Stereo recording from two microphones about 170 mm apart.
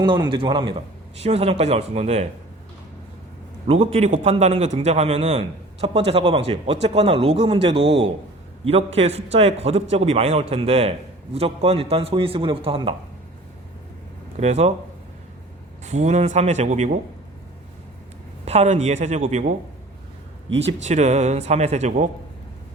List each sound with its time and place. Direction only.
0.0 s a man's voice: 25° right (ahead or behind)
3.7 s a man's voice: 35° right (ahead or behind)
14.3 s a man's voice: 40° right (ahead or behind)
15.8 s speech: 45° right (ahead or behind)
18.4 s a man's voice: 40° right (ahead or behind)
20.8 s a man's voice: 40° right (ahead or behind)